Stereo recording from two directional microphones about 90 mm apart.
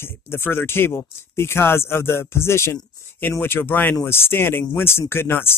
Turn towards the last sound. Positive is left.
turn(degrees=25)  # may be behind; listen again after turning